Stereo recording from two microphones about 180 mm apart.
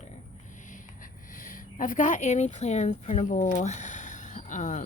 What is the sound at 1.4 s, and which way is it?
Speech, 50° left (ahead or behind).